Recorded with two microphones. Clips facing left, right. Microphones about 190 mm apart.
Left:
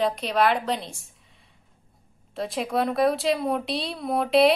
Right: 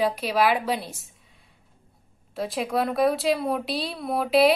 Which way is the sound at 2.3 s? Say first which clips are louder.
Even; centre (ahead or behind).